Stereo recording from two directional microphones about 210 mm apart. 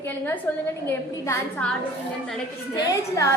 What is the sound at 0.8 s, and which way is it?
Speech, 10° left (ahead or behind).